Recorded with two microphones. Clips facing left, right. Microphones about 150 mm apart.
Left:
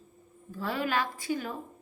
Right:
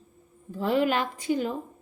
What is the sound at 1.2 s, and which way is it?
Speech, 20° right (ahead or behind).